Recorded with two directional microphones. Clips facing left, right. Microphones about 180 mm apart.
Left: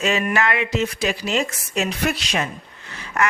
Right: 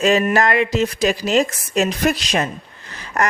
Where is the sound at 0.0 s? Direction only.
40° right (ahead or behind).